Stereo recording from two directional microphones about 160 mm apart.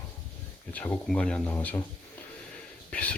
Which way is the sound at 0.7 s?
10° left (ahead or behind).